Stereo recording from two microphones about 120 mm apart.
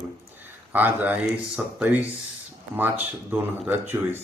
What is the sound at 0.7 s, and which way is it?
Speech, 15° right (ahead or behind).